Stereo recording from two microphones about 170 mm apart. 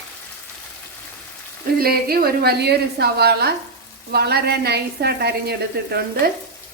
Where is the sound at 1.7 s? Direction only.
65° right (ahead or behind).